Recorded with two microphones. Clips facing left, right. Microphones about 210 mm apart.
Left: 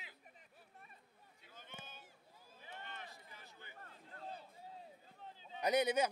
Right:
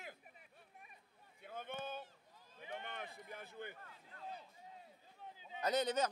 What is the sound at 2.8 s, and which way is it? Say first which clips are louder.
Run: right 4 dB; 55° right (ahead or behind).